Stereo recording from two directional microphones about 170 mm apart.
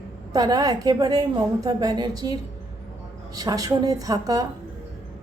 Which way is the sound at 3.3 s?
20° right (ahead or behind).